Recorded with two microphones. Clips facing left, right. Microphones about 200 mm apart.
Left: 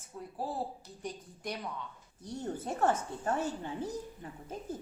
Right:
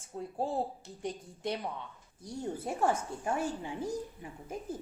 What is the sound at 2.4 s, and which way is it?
A woman's voice, 10° right (ahead or behind).